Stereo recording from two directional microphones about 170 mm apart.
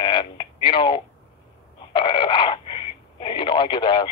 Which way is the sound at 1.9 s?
30° left (ahead or behind).